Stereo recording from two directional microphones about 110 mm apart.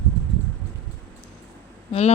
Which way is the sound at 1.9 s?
70° left (ahead or behind).